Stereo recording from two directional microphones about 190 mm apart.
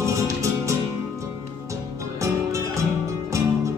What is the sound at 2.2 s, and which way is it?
Music, 15° right (ahead or behind).